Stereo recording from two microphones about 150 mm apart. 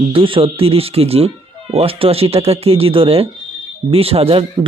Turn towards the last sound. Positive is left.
turn(degrees=-40)  # may be behind; listen again after turning